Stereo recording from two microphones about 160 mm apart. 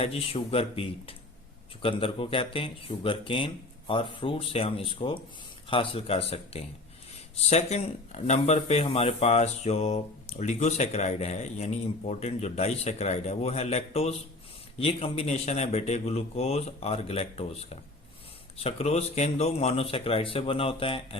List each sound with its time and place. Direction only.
0.0 s speech: 35° left (ahead or behind)